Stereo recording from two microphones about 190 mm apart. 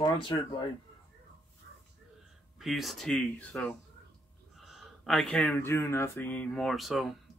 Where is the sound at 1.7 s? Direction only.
65° right (ahead or behind).